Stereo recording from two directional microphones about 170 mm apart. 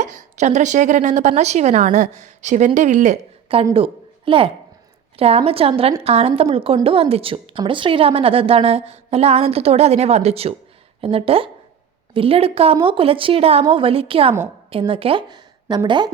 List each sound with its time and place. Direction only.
0.0 s a woman's voice: 45° right (ahead or behind); by 16.0 s 25° right (ahead or behind)